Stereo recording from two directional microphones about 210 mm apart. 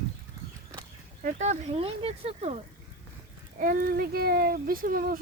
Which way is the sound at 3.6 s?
40° right (ahead or behind).